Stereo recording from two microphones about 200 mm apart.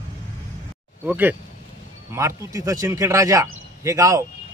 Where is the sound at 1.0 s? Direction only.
10° right (ahead or behind).